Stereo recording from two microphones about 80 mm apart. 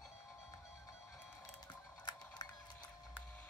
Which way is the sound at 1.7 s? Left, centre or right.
Left.